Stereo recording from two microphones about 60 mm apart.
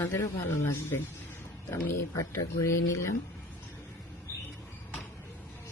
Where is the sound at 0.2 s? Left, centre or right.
Left.